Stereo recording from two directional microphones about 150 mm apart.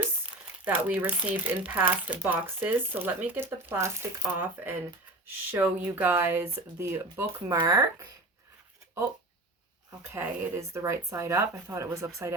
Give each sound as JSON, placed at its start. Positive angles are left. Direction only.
{"t": 0.6, "sound": "speech", "side_deg": -10}
{"t": 10.0, "sound": "speech", "side_deg": -15}